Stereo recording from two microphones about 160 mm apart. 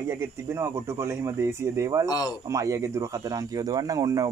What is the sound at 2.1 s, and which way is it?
Speech, 25° left (ahead or behind).